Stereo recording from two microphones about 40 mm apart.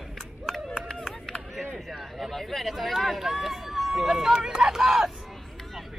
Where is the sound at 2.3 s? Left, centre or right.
Centre.